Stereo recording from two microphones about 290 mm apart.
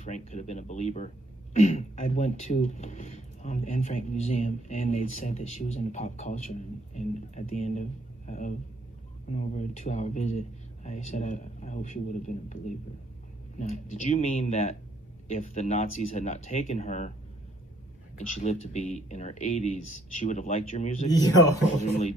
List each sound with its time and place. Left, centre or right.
0.0 s speech: left
18.1 s speech: left